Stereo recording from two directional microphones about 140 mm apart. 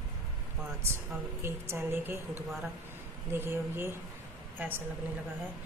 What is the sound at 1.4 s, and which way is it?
Speech, 15° right (ahead or behind).